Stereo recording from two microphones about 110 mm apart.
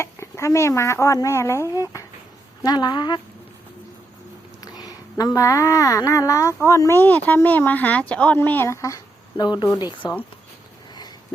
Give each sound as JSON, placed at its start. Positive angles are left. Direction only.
{"t": 0.0, "sound": "speech", "side_deg": 25}
{"t": 2.6, "sound": "speech", "side_deg": 40}
{"t": 4.8, "sound": "a woman's voice", "side_deg": 35}
{"t": 9.4, "sound": "speech", "side_deg": 40}